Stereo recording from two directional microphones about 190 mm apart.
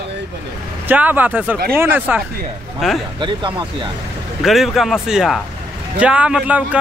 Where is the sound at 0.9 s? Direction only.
10° right (ahead or behind).